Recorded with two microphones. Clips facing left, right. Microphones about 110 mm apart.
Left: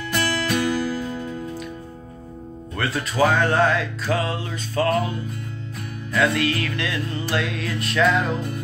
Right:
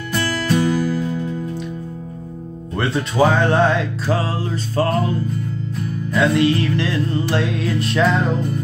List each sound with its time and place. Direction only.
0.6 s music: 15° right (ahead or behind)
2.8 s music: 30° right (ahead or behind)
6.1 s music: 25° right (ahead or behind)